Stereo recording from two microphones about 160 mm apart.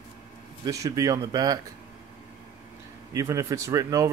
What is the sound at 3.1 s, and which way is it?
Speech, 20° right (ahead or behind).